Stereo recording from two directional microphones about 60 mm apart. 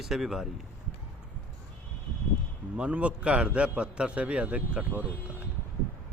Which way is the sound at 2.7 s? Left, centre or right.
Centre.